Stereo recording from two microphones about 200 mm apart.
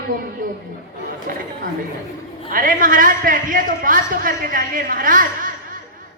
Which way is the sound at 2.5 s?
45° right (ahead or behind).